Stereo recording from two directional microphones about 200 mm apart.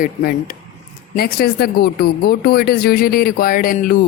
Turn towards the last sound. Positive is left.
turn(degrees=45)  # may be behind; listen again after turning